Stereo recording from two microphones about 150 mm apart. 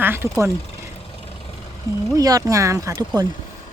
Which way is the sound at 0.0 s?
15° right (ahead or behind).